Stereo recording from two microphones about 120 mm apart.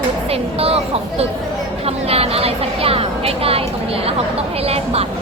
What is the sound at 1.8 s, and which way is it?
Speech, 55° right (ahead or behind).